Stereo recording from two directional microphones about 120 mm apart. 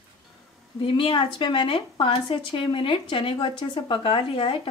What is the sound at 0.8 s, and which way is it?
Speech, 45° left (ahead or behind).